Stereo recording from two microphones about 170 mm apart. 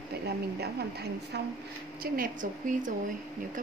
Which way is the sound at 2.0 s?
60° right (ahead or behind).